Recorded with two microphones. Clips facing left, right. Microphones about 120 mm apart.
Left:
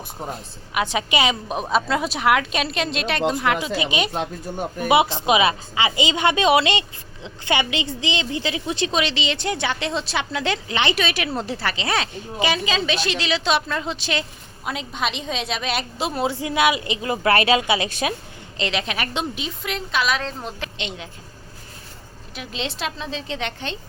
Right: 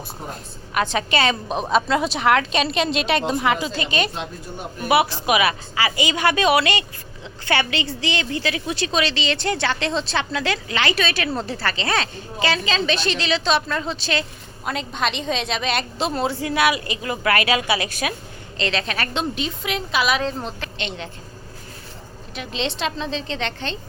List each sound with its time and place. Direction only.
0.7 s a woman's voice: 10° left (ahead or behind)
1.6 s a woman's voice: centre (ahead or behind)
3.8 s a woman's voice: 15° left (ahead or behind)
18.5 s a woman's voice: 15° left (ahead or behind)
19.5 s a woman's voice: centre (ahead or behind)
20.4 s a woman's voice: 15° left (ahead or behind)
22.4 s a woman's voice: 5° left (ahead or behind)